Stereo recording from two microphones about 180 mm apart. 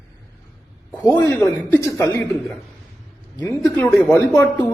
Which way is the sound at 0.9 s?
10° left (ahead or behind).